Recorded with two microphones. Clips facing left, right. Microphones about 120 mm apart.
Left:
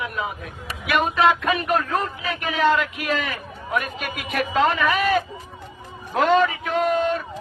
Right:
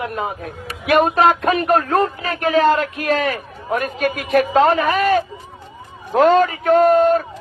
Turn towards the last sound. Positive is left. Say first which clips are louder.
# right 9 dB
turn(degrees=-40)  # may be behind; listen again after turning